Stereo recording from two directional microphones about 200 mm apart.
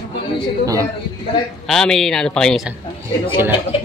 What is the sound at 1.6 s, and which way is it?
A man's voice, centre (ahead or behind).